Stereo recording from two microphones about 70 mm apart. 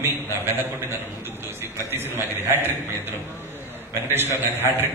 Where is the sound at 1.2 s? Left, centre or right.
Right.